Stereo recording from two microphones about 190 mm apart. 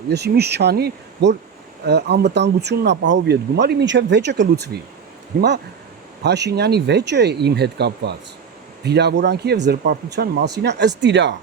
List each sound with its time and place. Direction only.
0.1 s speech: 60° right (ahead or behind)
6.2 s speech: 60° right (ahead or behind)